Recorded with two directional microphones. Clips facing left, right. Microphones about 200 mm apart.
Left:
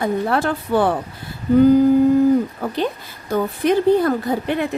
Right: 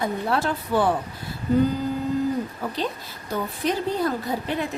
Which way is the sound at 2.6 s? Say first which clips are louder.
Left 6 dB; 55° left (ahead or behind).